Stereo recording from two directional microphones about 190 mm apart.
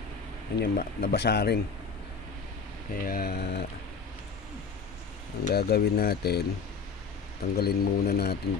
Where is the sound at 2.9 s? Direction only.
50° left (ahead or behind).